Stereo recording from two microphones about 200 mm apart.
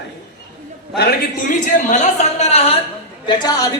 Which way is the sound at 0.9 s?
45° left (ahead or behind).